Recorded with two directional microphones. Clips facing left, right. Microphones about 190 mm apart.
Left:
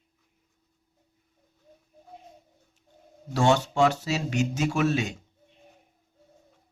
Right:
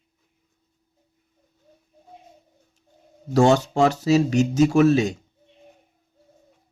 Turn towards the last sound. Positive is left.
turn(degrees=-40)  # may be behind; listen again after turning